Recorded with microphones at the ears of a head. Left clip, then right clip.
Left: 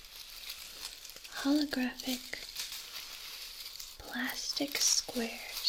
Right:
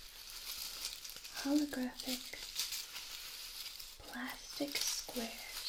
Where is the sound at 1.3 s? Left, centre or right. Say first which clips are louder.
Left 5 dB; left.